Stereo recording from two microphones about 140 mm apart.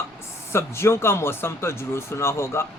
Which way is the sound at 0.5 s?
20° left (ahead or behind).